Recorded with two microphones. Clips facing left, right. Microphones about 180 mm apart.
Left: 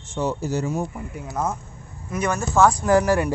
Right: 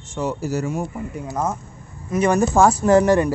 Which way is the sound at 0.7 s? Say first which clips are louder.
Right 1 dB; 15° right (ahead or behind).